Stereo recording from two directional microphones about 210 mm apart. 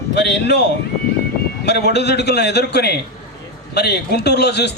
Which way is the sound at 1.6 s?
50° left (ahead or behind).